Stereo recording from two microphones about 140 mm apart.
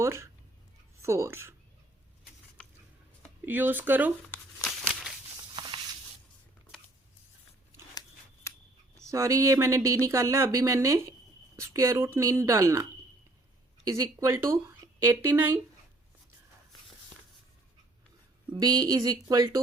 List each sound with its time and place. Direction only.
0.0 s speech: 20° right (ahead or behind)
3.4 s speech: 15° right (ahead or behind)
5.5 s a sound: 35° right (ahead or behind)
8.4 s a sound: 20° left (ahead or behind)
9.0 s speech: 20° right (ahead or behind)
13.8 s speech: 20° right (ahead or behind)
18.6 s speech: 25° right (ahead or behind)